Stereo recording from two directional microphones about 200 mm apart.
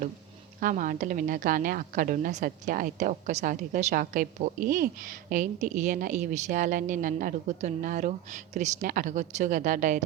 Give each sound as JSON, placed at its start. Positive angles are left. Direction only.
{"t": 0.6, "sound": "a woman's voice", "side_deg": -40}